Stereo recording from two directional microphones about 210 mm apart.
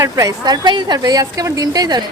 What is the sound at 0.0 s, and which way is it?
A woman's voice, 15° right (ahead or behind).